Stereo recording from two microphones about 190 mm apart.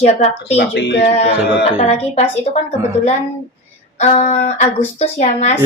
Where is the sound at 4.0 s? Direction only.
35° left (ahead or behind).